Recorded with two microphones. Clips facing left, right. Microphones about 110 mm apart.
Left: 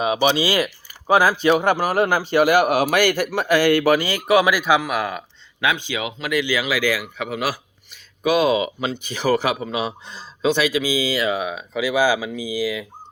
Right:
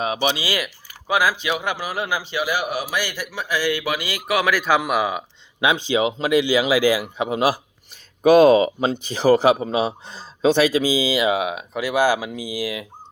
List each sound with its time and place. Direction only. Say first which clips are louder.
0.3 s speech: left 6 dB; 25° left (ahead or behind)
4.3 s speech: left 5 dB; 20° left (ahead or behind)
4.5 s speech: even; centre (ahead or behind)
5.5 s speech: right 4 dB; 25° right (ahead or behind)
8.2 s speech: right 6 dB; 45° right (ahead or behind)
11.1 s speech: right 2 dB; 15° right (ahead or behind)
11.8 s speech: even; centre (ahead or behind)